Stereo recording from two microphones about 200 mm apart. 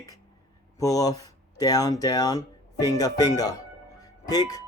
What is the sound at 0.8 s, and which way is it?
Speech, 15° left (ahead or behind).